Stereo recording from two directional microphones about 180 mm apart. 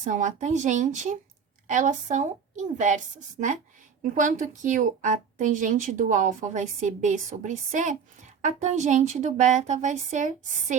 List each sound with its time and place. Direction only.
0.0 s a woman's voice: 40° right (ahead or behind)
4.0 s a woman's voice: 45° right (ahead or behind)